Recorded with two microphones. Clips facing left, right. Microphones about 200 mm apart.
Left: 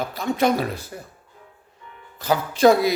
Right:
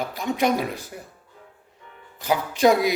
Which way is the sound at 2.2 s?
15° right (ahead or behind).